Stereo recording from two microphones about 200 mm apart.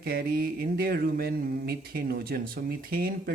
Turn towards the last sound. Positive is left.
turn(degrees=-50)  # may be behind; listen again after turning